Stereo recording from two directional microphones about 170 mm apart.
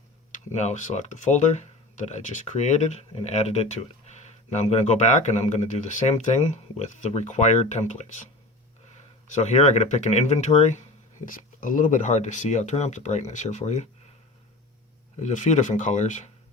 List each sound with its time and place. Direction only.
0.3 s speech: 45° left (ahead or behind)
9.3 s speech: 40° left (ahead or behind)
15.2 s speech: 45° left (ahead or behind)